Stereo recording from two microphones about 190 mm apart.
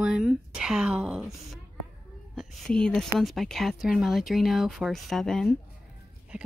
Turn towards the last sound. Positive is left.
turn(degrees=0)  # may be behind; listen again after turning